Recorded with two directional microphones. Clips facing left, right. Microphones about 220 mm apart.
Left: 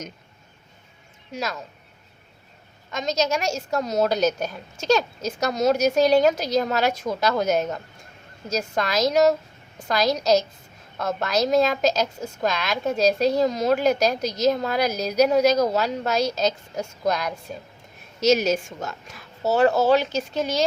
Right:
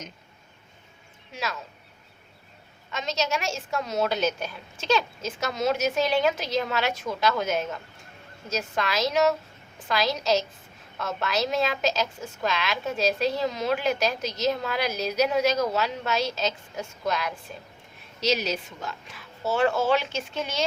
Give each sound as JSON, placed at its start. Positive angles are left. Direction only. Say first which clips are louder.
{"t": 1.3, "sound": "a woman's voice", "louder": "left 4 dB", "side_deg": 40}
{"t": 2.9, "sound": "a woman's voice", "louder": "left 5 dB", "side_deg": 40}